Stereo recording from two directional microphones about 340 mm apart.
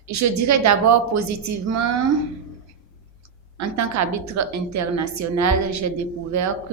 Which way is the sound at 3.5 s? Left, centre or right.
Right.